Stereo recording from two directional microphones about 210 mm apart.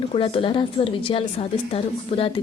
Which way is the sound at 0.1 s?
25° left (ahead or behind).